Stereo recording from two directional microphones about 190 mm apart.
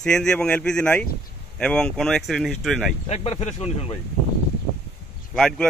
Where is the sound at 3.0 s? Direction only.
35° left (ahead or behind).